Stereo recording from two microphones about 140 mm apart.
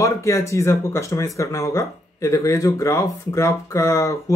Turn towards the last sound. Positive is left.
turn(degrees=20)  # may be behind; listen again after turning